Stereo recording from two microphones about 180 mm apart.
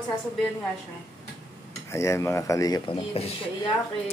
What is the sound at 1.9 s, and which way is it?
Speech, 15° left (ahead or behind).